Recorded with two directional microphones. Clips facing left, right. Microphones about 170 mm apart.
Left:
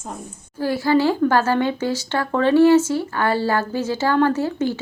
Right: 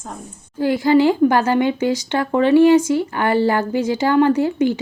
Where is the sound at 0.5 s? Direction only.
15° right (ahead or behind).